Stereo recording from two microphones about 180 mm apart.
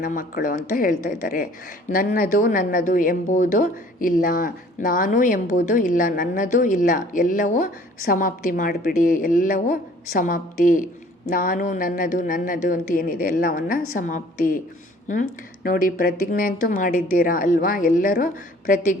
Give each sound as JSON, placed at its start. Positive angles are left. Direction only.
{"t": 0.0, "sound": "a woman's voice", "side_deg": 50}